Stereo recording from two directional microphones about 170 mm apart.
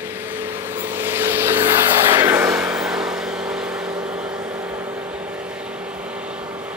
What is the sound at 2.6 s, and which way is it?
Vehicle, 5° right (ahead or behind).